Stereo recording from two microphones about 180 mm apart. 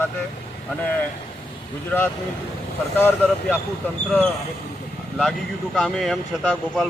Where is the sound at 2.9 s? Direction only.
10° left (ahead or behind).